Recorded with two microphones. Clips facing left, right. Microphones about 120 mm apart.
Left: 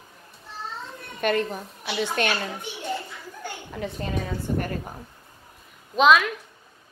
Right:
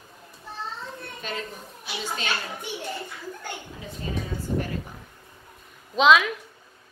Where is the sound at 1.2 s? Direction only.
65° left (ahead or behind).